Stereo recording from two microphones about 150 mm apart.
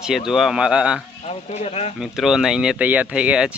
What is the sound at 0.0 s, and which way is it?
Speech, centre (ahead or behind).